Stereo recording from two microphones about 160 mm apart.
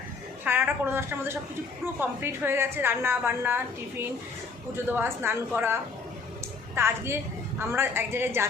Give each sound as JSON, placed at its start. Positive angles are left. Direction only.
{"t": 0.4, "sound": "a woman's voice", "side_deg": -15}
{"t": 6.7, "sound": "a woman's voice", "side_deg": -15}